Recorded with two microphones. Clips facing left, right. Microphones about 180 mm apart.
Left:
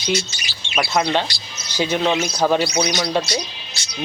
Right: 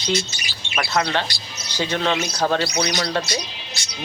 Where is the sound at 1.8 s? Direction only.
10° left (ahead or behind).